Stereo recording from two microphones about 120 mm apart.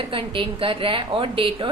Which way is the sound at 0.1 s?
50° right (ahead or behind).